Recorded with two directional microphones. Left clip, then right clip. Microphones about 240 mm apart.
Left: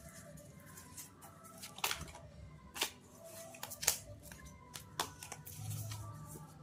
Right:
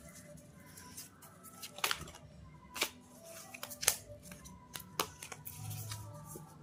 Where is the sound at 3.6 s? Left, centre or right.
Centre.